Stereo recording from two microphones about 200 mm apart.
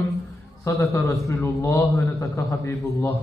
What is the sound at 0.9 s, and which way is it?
A man's voice, 15° left (ahead or behind).